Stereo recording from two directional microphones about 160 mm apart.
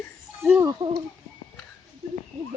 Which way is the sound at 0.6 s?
30° right (ahead or behind).